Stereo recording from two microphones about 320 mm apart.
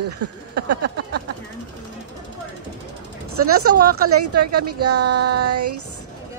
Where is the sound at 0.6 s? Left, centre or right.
Right.